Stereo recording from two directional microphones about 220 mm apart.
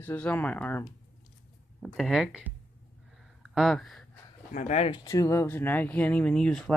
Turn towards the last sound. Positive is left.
turn(degrees=5)  # may be behind; listen again after turning